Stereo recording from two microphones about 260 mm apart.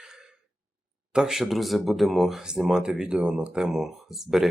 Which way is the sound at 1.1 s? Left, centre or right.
Centre.